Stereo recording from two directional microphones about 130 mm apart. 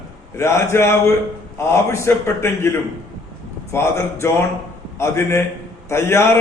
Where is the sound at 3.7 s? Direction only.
20° left (ahead or behind).